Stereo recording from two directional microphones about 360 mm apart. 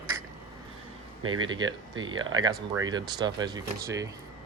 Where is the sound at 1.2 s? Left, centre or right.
Right.